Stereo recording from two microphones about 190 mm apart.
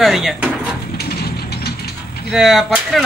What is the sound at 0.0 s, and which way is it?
Speech, centre (ahead or behind).